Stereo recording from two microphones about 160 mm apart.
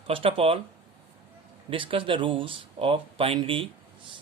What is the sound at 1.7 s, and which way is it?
Speech, 35° right (ahead or behind).